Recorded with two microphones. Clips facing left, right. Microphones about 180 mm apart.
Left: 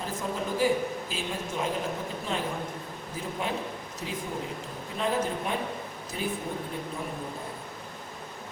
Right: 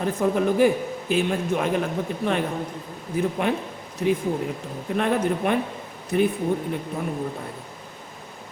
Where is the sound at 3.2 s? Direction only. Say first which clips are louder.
Right 9 dB; 65° right (ahead or behind).